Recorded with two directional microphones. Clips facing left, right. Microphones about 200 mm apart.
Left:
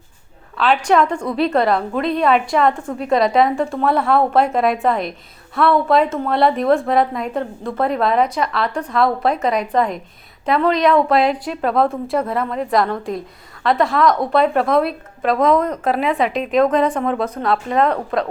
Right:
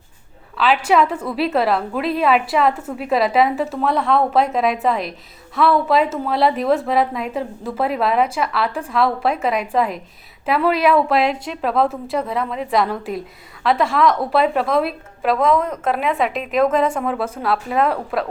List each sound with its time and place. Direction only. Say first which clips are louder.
0.5 s a woman's voice: left 1 dB; centre (ahead or behind)